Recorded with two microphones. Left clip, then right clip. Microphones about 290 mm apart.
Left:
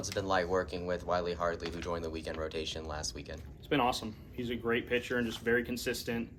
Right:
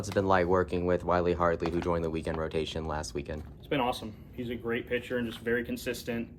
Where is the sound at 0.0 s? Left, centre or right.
Right.